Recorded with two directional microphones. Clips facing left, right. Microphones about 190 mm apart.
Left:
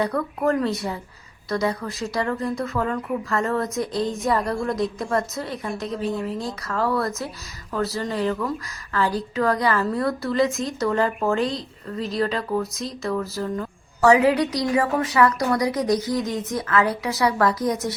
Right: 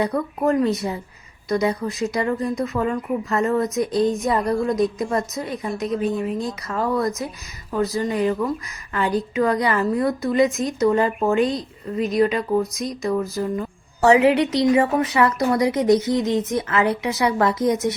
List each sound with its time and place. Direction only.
0.0 s a woman's voice: 20° right (ahead or behind)
14.0 s a woman's voice: 25° right (ahead or behind)